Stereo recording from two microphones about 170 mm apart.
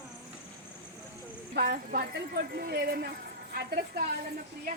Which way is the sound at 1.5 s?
55° right (ahead or behind).